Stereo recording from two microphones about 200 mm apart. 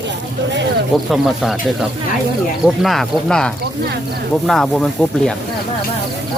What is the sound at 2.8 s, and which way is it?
Speech, centre (ahead or behind).